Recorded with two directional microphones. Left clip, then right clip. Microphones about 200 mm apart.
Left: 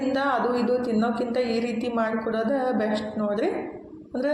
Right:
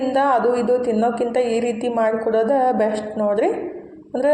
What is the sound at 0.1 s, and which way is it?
Music, 15° right (ahead or behind).